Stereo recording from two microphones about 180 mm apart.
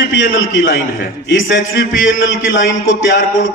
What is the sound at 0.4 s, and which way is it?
A man's voice, 90° left.